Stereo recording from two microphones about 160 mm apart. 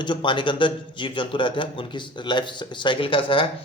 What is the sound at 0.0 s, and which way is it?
A man's voice, 30° left (ahead or behind).